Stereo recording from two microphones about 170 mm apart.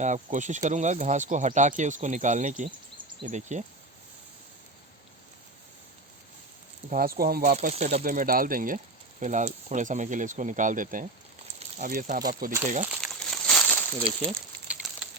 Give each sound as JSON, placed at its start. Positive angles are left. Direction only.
{"t": 0.0, "sound": "speech", "side_deg": -45}
{"t": 6.9, "sound": "speech", "side_deg": -60}
{"t": 7.5, "sound": "speech", "side_deg": -40}
{"t": 8.0, "sound": "speech", "side_deg": -55}
{"t": 9.2, "sound": "speech", "side_deg": -45}
{"t": 12.9, "sound": "a sound", "side_deg": 5}